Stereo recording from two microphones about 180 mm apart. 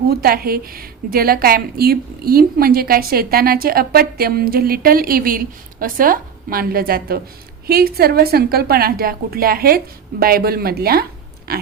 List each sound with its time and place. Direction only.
0.1 s a woman's voice: 55° right (ahead or behind)